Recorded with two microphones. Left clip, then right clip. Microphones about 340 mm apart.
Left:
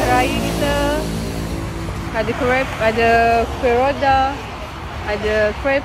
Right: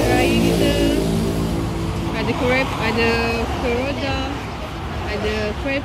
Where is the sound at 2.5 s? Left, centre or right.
Centre.